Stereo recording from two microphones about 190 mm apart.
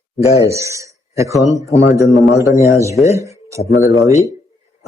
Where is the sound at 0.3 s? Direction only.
15° right (ahead or behind).